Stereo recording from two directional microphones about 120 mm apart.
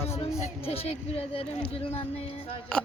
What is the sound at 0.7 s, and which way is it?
Speech, 55° left (ahead or behind).